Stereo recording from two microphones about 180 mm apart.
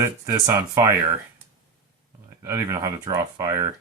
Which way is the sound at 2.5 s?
15° right (ahead or behind).